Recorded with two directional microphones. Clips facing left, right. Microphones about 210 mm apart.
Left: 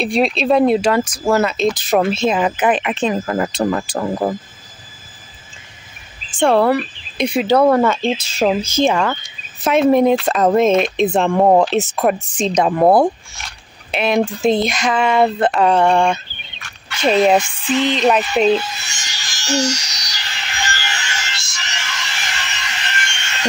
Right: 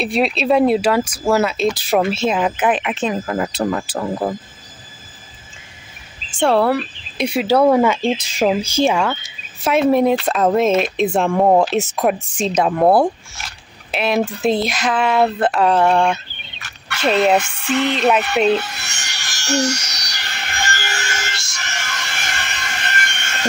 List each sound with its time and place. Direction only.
0.0 s speech: 5° right (ahead or behind)
4.0 s speech: 10° left (ahead or behind)
6.4 s speech: 5° right (ahead or behind)
17.4 s music: 65° right (ahead or behind)
18.5 s a sound: 60° right (ahead or behind)